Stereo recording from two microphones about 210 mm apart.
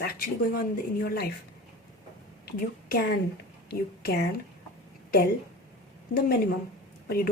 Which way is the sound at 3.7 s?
50° left (ahead or behind).